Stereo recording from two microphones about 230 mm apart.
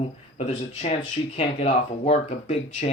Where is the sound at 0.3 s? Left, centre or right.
Left.